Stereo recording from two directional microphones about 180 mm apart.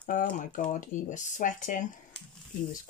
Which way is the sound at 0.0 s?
50° left (ahead or behind).